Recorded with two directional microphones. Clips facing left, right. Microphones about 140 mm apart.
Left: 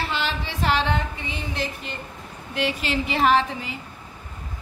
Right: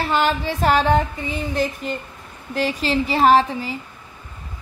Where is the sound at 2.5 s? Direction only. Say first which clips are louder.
Right 4 dB; 40° right (ahead or behind).